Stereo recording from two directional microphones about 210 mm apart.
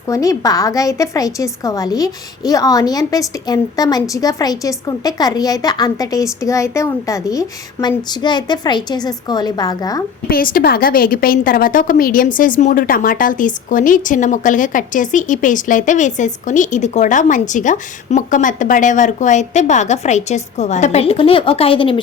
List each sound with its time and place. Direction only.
0.1 s a woman's voice: 15° left (ahead or behind)
10.2 s a woman's voice: 45° left (ahead or behind); by 21.9 s 25° left (ahead or behind)